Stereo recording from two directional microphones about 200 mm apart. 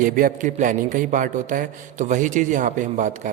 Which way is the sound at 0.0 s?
45° right (ahead or behind).